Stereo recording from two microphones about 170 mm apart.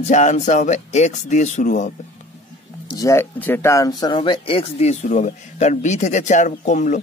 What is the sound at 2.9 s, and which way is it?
Speech, 15° left (ahead or behind).